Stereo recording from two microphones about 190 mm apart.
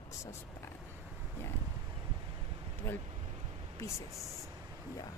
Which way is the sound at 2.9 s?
10° left (ahead or behind).